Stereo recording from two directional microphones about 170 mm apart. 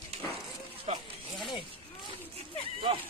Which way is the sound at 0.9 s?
35° right (ahead or behind).